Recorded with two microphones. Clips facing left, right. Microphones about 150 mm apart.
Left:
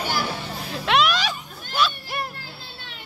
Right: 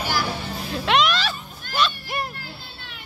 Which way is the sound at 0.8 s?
5° left (ahead or behind).